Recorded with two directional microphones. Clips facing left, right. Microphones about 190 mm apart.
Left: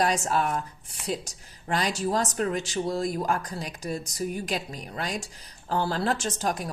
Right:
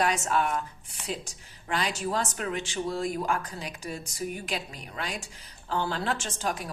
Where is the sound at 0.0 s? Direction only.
35° left (ahead or behind).